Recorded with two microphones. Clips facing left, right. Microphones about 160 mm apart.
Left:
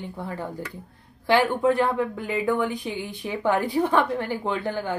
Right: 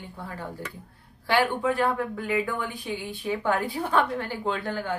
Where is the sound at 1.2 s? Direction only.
15° left (ahead or behind).